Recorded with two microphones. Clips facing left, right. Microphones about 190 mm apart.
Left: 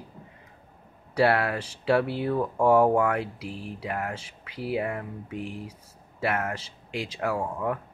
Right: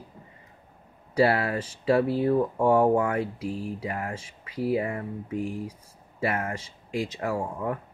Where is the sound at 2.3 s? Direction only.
25° right (ahead or behind).